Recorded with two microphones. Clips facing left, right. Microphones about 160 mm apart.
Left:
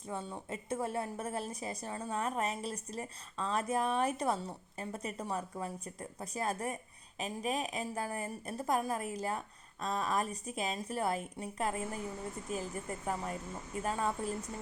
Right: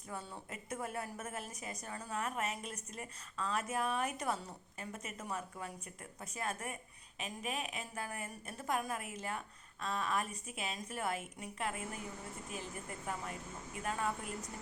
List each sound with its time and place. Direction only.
0.1 s a woman's voice: 20° left (ahead or behind)